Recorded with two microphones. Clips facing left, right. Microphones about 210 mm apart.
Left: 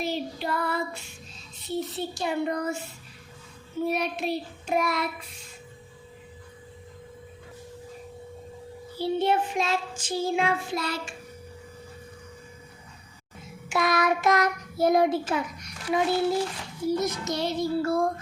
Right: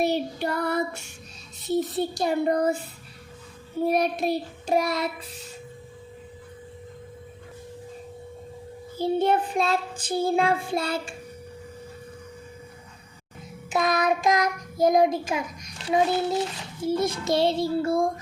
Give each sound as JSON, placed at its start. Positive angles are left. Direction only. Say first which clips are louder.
{"t": 0.0, "sound": "child singing", "louder": "right 5 dB", "side_deg": -65}
{"t": 1.6, "sound": "child singing", "louder": "right 6 dB", "side_deg": -45}
{"t": 3.8, "sound": "child singing", "louder": "right 5 dB", "side_deg": -45}
{"t": 9.0, "sound": "child singing", "louder": "right 2 dB", "side_deg": -45}
{"t": 9.7, "sound": "child singing", "louder": "right 3 dB", "side_deg": -55}
{"t": 10.3, "sound": "a child's voice", "louder": "right 3 dB", "side_deg": -30}
{"t": 13.7, "sound": "child singing", "louder": "right 1 dB", "side_deg": -20}
{"t": 15.8, "sound": "a child's voice", "louder": "right 1 dB", "side_deg": -25}
{"t": 17.8, "sound": "child singing", "louder": "right 2 dB", "side_deg": -15}